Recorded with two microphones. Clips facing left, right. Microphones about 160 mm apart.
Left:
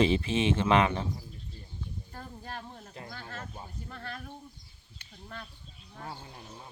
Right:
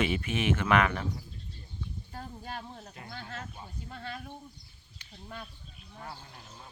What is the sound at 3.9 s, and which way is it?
Speech, 15° right (ahead or behind).